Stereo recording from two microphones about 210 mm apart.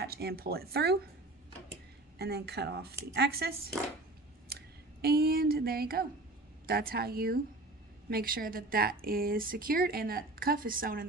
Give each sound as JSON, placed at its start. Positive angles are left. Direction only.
{"t": 0.0, "sound": "speech", "side_deg": -50}
{"t": 2.1, "sound": "speech", "side_deg": -50}